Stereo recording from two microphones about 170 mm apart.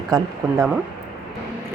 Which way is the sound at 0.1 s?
20° right (ahead or behind).